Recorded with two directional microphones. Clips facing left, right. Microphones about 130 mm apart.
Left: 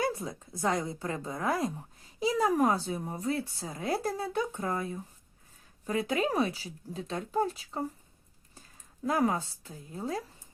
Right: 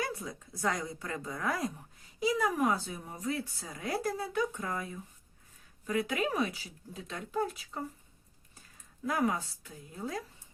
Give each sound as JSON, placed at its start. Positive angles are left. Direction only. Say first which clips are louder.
{"t": 0.0, "sound": "speech", "louder": "left 5 dB", "side_deg": 30}
{"t": 9.0, "sound": "speech", "louder": "left 3 dB", "side_deg": 30}